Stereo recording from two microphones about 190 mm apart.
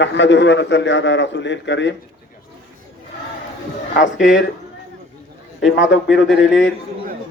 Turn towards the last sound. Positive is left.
turn(degrees=80)